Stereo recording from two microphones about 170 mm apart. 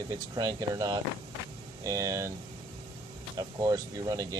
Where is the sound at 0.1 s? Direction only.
20° right (ahead or behind).